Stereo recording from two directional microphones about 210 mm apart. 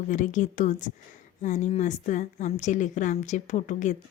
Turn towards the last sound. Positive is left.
turn(degrees=35)  # may be behind; listen again after turning